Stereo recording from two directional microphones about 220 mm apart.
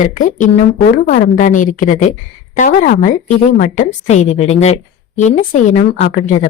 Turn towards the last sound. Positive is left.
turn(degrees=35)  # may be behind; listen again after turning